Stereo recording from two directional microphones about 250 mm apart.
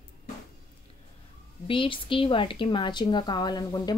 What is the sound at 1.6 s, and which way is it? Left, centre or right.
A woman's voice, left.